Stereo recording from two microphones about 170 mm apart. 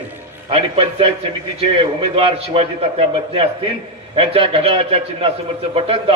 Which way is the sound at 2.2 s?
35° right (ahead or behind).